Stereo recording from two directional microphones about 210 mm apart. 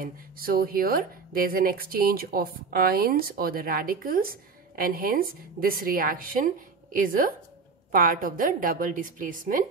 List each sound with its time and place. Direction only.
0.0 s a woman's voice: 45° right (ahead or behind)